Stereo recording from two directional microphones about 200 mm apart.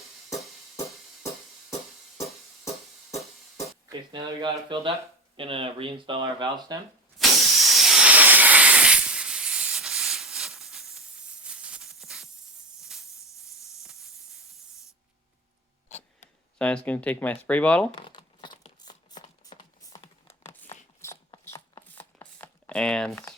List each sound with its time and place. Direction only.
3.8 s speech: 20° right (ahead or behind)
7.2 s hiss: centre (ahead or behind)
13.1 s hiss: 15° left (ahead or behind)
13.8 s hiss: centre (ahead or behind)
15.9 s a sound: 35° left (ahead or behind)
16.6 s speech: 5° left (ahead or behind)
17.9 s crumpling: 25° left (ahead or behind)
19.5 s a sound: 20° left (ahead or behind)